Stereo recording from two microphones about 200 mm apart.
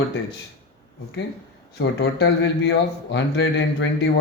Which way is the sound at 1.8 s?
60° left (ahead or behind).